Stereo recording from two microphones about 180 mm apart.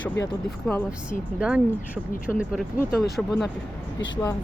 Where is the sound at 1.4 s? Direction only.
5° right (ahead or behind).